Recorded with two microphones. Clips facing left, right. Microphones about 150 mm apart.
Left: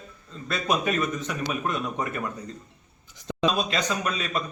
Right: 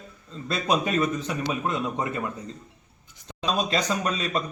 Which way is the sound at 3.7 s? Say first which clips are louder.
Right 2 dB; 35° right (ahead or behind).